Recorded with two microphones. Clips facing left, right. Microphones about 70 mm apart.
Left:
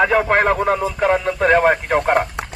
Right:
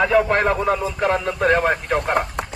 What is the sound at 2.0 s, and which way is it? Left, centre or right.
Speech, left.